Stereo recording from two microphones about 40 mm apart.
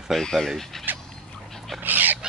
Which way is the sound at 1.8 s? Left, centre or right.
Right.